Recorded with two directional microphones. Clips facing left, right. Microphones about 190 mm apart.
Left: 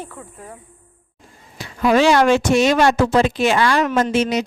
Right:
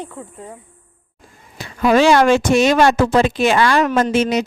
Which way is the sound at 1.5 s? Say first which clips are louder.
Right 2 dB; 50° right (ahead or behind).